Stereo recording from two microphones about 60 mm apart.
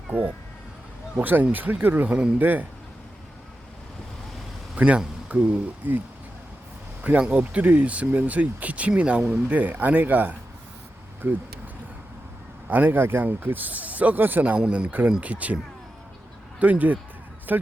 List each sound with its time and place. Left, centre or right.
0.1 s speech: right
4.7 s speech: centre
7.0 s speech: centre
12.6 s speech: right
14.6 s speech: centre